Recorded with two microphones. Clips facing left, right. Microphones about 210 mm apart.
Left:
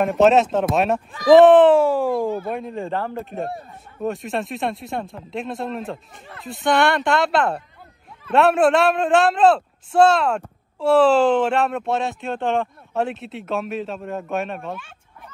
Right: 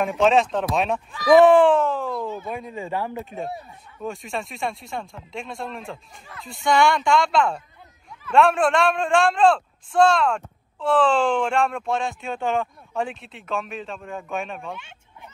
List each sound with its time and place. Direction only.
0.0 s speech: 5° left (ahead or behind)
2.1 s speech: 50° left (ahead or behind)
2.5 s speech: centre (ahead or behind)
3.1 s speech: 50° left (ahead or behind)
4.1 s speech: centre (ahead or behind)